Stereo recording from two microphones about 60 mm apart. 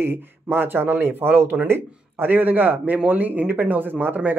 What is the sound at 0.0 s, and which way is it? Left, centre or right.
Speech, right.